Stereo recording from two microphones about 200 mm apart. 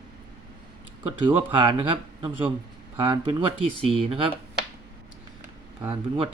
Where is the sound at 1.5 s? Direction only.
25° right (ahead or behind).